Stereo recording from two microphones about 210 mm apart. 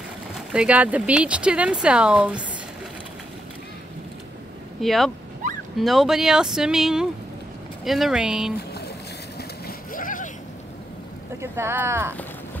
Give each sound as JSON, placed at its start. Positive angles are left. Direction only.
{"t": 0.5, "sound": "speech", "side_deg": -5}
{"t": 4.8, "sound": "speech", "side_deg": 0}
{"t": 9.4, "sound": "vehicle", "side_deg": 45}
{"t": 11.5, "sound": "speech", "side_deg": -10}